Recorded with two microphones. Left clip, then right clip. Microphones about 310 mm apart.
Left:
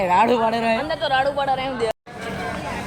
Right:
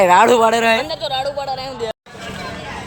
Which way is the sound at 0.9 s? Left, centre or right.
Right.